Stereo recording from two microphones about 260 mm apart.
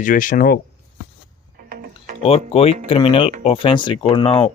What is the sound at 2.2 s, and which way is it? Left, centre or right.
Speech, left.